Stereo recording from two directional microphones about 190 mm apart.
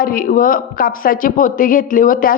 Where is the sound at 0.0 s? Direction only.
45° left (ahead or behind).